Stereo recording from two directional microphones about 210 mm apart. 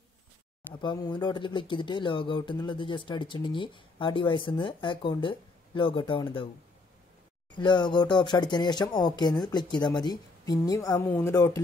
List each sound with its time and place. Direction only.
0.7 s speech: 20° left (ahead or behind)
7.5 s speech: 20° left (ahead or behind)